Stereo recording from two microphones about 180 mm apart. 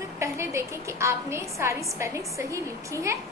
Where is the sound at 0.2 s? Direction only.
15° right (ahead or behind).